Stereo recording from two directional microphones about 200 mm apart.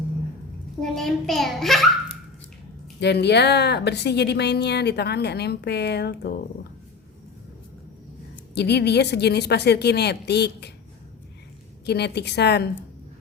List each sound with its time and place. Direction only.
0.8 s a child's voice: centre (ahead or behind)
3.0 s speech: 55° left (ahead or behind)
8.5 s speech: 55° left (ahead or behind)
11.9 s speech: 55° left (ahead or behind)